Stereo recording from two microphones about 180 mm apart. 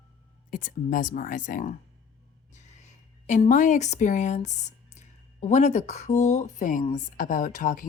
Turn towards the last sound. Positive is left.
turn(degrees=50)  # may be behind; listen again after turning